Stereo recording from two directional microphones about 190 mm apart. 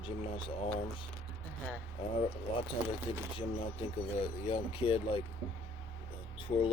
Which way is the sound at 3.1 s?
25° left (ahead or behind).